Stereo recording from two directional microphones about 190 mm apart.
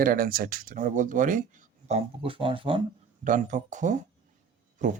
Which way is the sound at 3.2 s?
40° right (ahead or behind).